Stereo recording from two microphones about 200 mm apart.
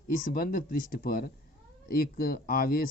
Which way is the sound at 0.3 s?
45° left (ahead or behind).